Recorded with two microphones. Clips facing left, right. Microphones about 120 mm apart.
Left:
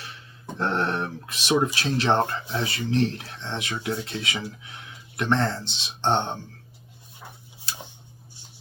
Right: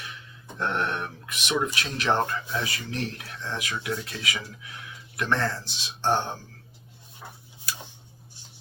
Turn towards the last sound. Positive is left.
turn(degrees=25)  # may be behind; listen again after turning